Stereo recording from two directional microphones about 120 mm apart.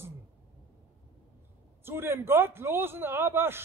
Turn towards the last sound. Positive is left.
turn(degrees=-20)  # may be behind; listen again after turning